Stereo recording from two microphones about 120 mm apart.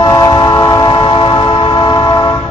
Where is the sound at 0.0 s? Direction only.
30° left (ahead or behind).